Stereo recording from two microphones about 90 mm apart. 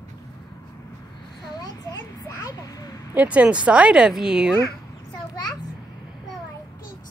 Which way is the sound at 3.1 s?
15° right (ahead or behind).